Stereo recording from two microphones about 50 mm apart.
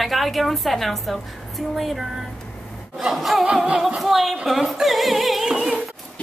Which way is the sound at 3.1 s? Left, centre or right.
Centre.